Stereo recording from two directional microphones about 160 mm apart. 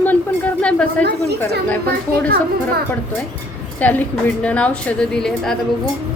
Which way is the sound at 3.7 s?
10° left (ahead or behind).